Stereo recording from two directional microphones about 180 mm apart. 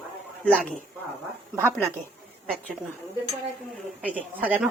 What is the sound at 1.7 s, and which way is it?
Speech, 15° right (ahead or behind).